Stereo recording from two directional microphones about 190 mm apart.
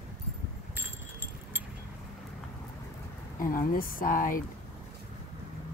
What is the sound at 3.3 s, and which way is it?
Speech, 45° left (ahead or behind).